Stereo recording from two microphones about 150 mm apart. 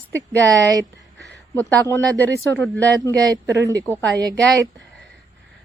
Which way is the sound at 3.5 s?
20° right (ahead or behind).